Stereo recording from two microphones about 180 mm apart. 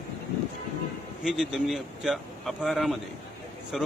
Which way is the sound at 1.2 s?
Centre (ahead or behind).